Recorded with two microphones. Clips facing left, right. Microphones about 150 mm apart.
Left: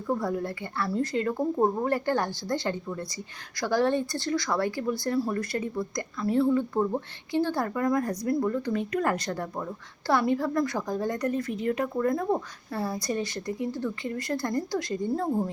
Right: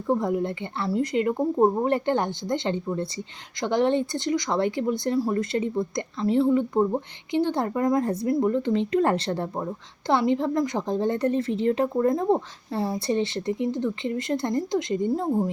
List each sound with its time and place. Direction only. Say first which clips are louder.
0.1 s a woman's voice: right 5 dB; 20° right (ahead or behind)